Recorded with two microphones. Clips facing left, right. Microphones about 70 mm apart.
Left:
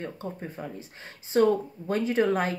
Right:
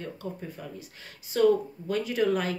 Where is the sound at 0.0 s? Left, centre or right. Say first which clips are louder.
Left 1 dB; left.